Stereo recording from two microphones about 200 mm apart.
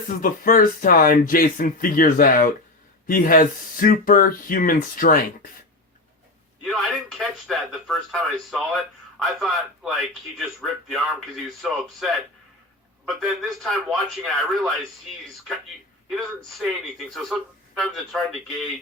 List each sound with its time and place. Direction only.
0.2 s speech: 45° left (ahead or behind)
6.7 s speech: centre (ahead or behind)
16.0 s speech: centre (ahead or behind)